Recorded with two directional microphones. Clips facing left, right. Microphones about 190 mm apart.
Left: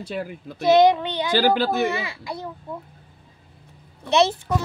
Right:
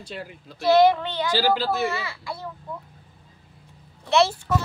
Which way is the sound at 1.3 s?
55° left (ahead or behind).